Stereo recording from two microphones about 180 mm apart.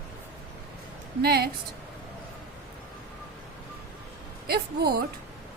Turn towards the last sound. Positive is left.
turn(degrees=-60)  # may be behind; listen again after turning